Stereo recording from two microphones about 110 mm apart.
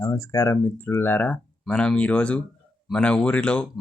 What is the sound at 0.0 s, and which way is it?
Speech, 30° left (ahead or behind).